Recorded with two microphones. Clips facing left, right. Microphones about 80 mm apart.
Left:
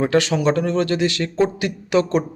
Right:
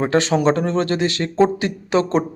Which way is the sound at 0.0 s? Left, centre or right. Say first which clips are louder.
Right 1 dB; right.